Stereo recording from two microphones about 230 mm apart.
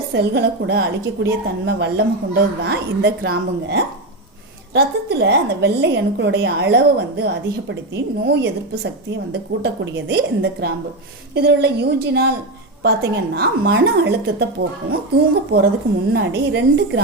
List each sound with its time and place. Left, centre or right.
0.1 s a woman's voice: right